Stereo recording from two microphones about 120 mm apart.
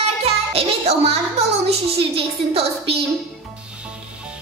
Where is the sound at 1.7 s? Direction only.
55° right (ahead or behind).